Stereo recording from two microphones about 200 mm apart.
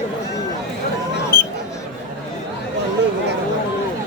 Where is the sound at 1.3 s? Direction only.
45° left (ahead or behind).